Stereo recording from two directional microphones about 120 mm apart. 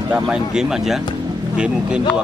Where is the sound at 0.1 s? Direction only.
5° right (ahead or behind).